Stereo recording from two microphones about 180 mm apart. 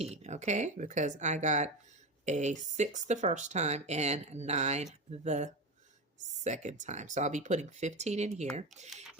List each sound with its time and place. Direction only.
0.0 s speech: 35° right (ahead or behind)